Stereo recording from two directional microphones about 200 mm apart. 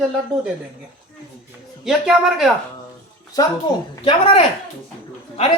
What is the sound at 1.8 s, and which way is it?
Speech, centre (ahead or behind).